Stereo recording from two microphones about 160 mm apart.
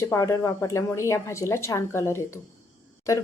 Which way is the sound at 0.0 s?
20° left (ahead or behind).